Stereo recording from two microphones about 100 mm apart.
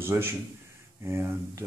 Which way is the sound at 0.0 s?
25° right (ahead or behind).